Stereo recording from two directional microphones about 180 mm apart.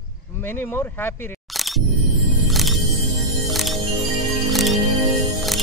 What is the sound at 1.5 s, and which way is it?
Music, centre (ahead or behind).